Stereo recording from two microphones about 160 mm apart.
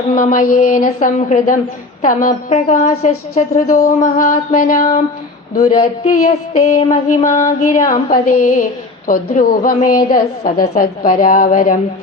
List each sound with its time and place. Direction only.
0.1 s a woman's voice: 55° left (ahead or behind)
1.2 s music: 50° left (ahead or behind)
3.7 s a woman's voice: 55° left (ahead or behind)
6.0 s music: 45° left (ahead or behind)
9.0 s a woman's voice: 60° left (ahead or behind)